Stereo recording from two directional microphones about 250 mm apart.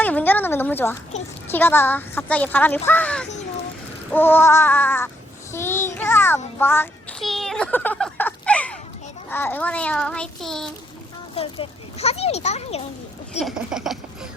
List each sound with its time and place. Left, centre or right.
0.0 s a sound: centre
1.5 s speech: centre
4.1 s a sound: centre
9.3 s child singing: centre
11.3 s a child's voice: left
13.4 s child singing: centre